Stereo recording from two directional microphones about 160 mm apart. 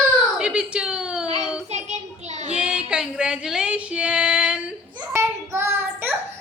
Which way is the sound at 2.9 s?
5° right (ahead or behind).